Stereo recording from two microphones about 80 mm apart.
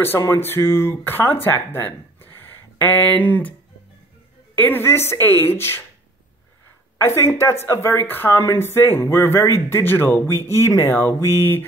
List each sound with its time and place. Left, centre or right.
0.3 s speech: left
4.6 s speech: left
7.0 s speech: left